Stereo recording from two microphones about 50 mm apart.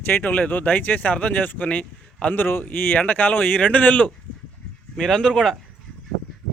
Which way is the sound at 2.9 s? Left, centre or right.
Left.